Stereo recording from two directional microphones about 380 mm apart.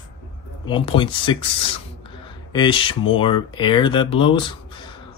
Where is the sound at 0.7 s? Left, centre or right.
Centre.